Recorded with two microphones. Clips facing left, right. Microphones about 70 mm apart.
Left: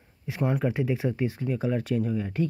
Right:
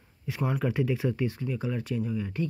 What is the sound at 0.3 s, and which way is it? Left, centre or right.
Speech, left.